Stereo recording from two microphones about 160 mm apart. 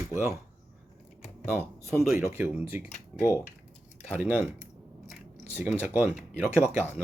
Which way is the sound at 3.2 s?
15° left (ahead or behind).